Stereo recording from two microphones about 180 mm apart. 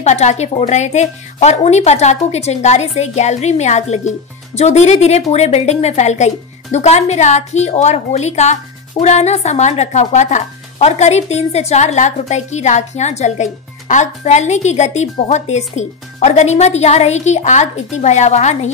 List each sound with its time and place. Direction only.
0.0 s speech: 40° left (ahead or behind)